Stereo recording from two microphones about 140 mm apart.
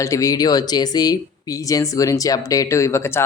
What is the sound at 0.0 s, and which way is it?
Speech, 25° left (ahead or behind).